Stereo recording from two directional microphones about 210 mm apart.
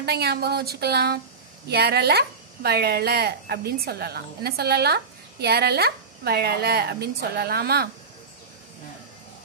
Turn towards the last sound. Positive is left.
turn(degrees=-50)  # may be behind; listen again after turning